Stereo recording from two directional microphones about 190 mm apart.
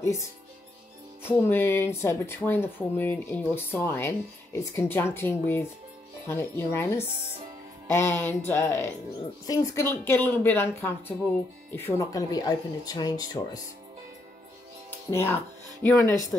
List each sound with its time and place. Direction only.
1.2 s speech: 10° left (ahead or behind)
14.9 s music: 15° left (ahead or behind)
15.8 s speech: centre (ahead or behind)